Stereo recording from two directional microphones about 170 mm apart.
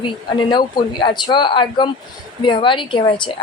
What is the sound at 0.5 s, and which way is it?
A woman's voice, 25° left (ahead or behind).